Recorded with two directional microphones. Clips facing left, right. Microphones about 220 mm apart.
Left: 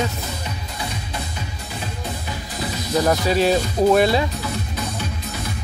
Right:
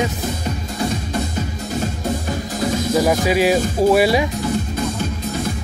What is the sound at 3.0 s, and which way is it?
Speech, 10° right (ahead or behind).